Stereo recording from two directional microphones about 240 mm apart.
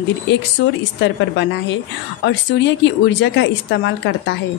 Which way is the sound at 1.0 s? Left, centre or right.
Left.